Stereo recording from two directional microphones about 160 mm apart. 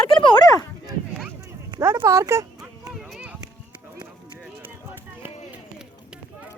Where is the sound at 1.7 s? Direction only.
20° right (ahead or behind).